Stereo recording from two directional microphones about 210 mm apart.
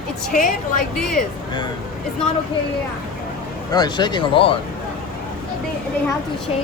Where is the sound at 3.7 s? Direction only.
20° left (ahead or behind).